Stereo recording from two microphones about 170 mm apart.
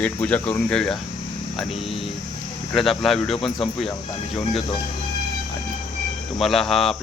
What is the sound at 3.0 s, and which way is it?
Speech, centre (ahead or behind).